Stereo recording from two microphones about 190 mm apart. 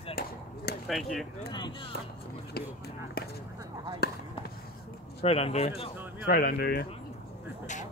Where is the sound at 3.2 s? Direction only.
50° left (ahead or behind).